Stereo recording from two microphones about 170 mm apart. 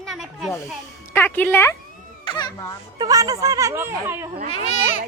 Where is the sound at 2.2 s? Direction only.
25° left (ahead or behind).